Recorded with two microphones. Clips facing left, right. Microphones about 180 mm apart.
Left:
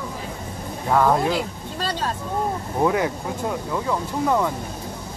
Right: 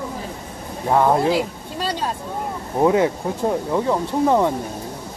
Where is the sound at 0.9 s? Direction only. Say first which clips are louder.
Right 2 dB; 20° right (ahead or behind).